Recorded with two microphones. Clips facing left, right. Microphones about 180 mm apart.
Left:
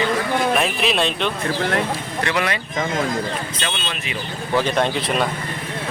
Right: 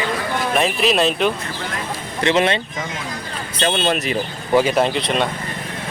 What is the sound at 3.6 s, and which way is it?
Speech, 40° right (ahead or behind).